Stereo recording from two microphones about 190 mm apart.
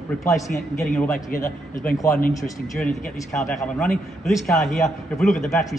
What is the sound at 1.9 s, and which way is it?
Speech, 15° left (ahead or behind).